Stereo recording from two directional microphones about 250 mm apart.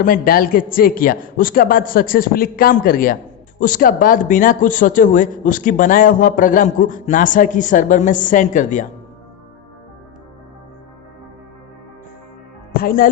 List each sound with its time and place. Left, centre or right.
0.0 s speech: left
12.7 s a woman's voice: left